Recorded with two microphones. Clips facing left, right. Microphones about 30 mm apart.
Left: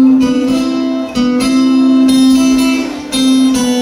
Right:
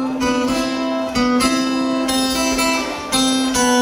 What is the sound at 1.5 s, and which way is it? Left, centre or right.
Music, centre.